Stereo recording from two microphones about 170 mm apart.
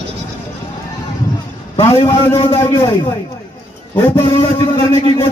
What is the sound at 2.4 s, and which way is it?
A man's voice, 25° left (ahead or behind).